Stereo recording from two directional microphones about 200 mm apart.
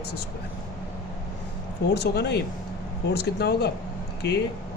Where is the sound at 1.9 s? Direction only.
55° left (ahead or behind).